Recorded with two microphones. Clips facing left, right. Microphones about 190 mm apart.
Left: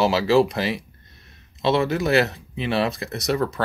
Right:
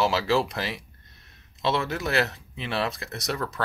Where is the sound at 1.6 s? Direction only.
5° left (ahead or behind).